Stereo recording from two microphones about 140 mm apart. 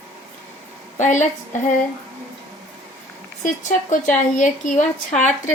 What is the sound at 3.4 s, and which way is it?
Speech, 60° left (ahead or behind).